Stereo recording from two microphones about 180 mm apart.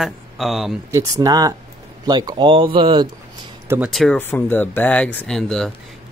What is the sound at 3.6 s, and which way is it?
Speech, 10° right (ahead or behind).